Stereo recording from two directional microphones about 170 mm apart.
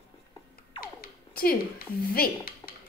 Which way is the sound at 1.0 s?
60° left (ahead or behind).